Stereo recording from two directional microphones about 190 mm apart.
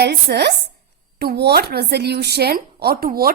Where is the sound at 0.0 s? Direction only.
60° right (ahead or behind).